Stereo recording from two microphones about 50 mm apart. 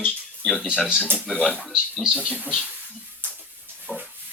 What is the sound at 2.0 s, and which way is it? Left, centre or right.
Speech, centre.